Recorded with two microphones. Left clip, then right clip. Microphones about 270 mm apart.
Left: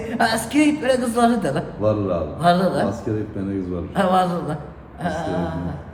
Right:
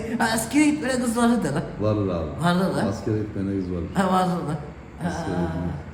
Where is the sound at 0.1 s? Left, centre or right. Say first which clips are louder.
Left 4 dB; centre.